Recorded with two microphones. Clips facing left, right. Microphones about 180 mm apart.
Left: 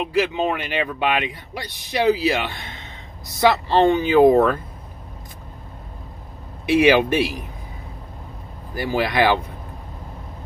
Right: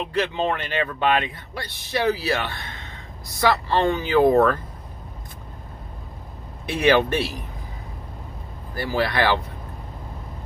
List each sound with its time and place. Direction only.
0.0 s speech: 10° left (ahead or behind)
6.7 s speech: 15° left (ahead or behind)
8.7 s speech: 15° left (ahead or behind)